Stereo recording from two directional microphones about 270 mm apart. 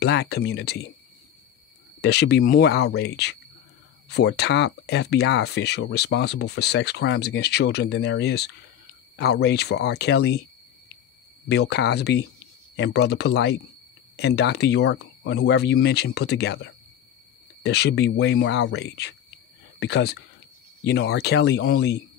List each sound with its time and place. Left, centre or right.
0.0 s speech: left
2.0 s speech: left
11.4 s speech: left
17.6 s speech: left